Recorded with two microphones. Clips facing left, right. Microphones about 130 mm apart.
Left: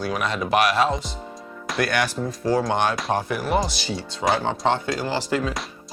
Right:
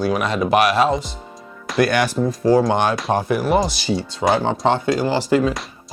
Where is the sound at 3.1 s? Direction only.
45° right (ahead or behind).